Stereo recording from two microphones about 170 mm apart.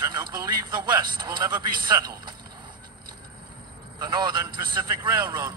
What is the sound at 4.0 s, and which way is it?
A man's voice, 25° right (ahead or behind).